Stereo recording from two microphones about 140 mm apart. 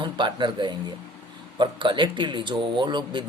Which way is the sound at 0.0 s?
35° right (ahead or behind).